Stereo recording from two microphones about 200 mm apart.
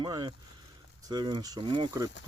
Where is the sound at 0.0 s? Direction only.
20° right (ahead or behind).